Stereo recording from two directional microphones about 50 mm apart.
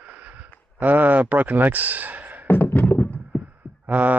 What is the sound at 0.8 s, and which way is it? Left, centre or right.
Speech, right.